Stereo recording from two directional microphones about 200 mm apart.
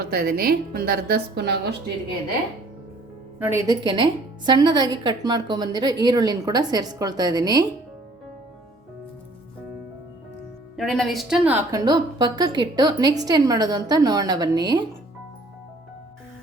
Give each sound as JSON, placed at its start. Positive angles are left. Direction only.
{"t": 0.0, "sound": "speech", "side_deg": -50}
{"t": 3.3, "sound": "a woman's voice", "side_deg": -10}
{"t": 10.8, "sound": "a woman's voice", "side_deg": 0}
{"t": 11.9, "sound": "a woman's voice", "side_deg": -20}